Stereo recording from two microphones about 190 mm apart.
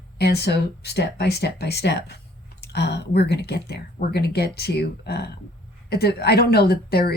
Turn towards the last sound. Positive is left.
turn(degrees=55)  # may be behind; listen again after turning